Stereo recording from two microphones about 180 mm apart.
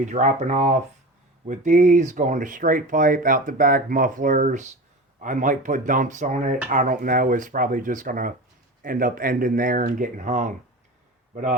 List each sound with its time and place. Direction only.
0.0 s speech: 40° right (ahead or behind)